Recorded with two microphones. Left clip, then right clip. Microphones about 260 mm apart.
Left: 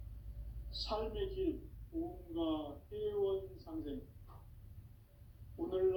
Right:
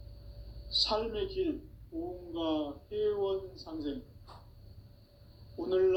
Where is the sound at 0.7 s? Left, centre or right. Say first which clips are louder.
Right 10 dB; right.